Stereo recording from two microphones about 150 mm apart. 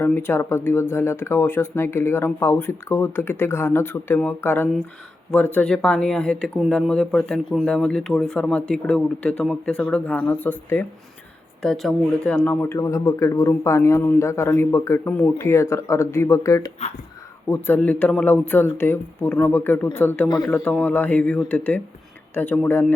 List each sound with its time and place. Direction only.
0.0 s speech: 15° left (ahead or behind)
12.5 s a man's voice: 15° left (ahead or behind)
17.5 s speech: 10° left (ahead or behind)